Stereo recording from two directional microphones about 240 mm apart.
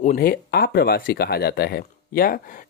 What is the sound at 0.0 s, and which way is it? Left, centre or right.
Speech, left.